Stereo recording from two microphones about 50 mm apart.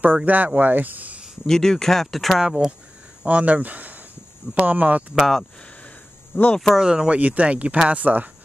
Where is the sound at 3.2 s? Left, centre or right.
Right.